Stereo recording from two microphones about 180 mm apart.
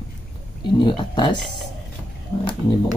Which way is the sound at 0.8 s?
25° left (ahead or behind).